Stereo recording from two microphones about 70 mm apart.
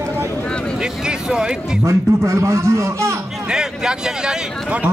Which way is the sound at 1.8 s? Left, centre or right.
Right.